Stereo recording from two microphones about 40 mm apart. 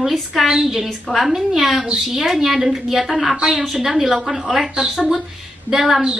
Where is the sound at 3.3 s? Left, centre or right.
Right.